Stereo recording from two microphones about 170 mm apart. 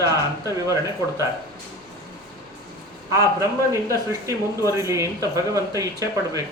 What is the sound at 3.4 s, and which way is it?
Speech, 20° right (ahead or behind).